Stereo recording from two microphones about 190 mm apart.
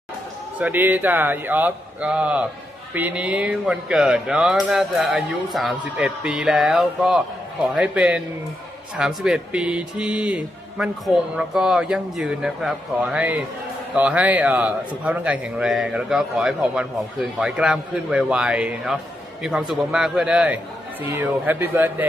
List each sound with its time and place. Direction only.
0.6 s a man's voice: 10° right (ahead or behind)